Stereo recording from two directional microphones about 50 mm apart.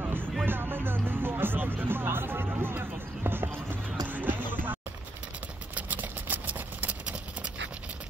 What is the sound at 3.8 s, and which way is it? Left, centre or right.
Music, right.